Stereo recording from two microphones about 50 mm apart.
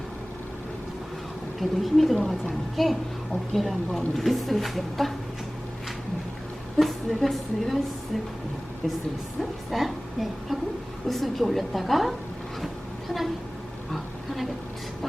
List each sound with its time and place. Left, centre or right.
1.5 s speech: centre
2.1 s a woman's voice: centre
2.5 s speech: centre
6.7 s a woman's voice: centre
9.4 s speech: centre